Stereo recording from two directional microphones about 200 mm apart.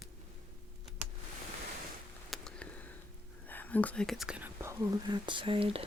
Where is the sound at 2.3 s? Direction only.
5° left (ahead or behind).